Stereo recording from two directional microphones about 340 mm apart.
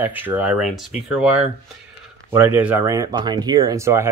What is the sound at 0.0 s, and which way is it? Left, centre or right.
Speech, centre.